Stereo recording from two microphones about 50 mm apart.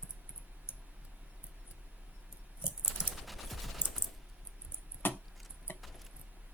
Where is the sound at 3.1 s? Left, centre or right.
Centre.